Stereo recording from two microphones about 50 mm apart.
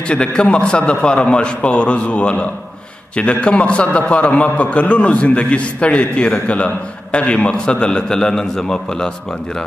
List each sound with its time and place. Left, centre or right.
0.1 s a man's voice: left